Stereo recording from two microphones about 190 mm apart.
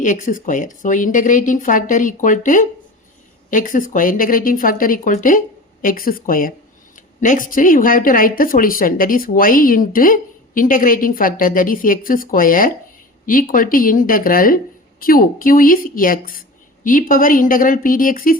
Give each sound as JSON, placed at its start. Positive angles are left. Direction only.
{"t": 0.0, "sound": "speech", "side_deg": 45}